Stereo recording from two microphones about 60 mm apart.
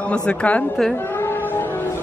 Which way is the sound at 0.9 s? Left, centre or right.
Left.